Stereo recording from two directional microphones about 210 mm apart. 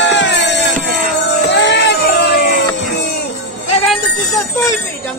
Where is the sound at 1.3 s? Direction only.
55° left (ahead or behind).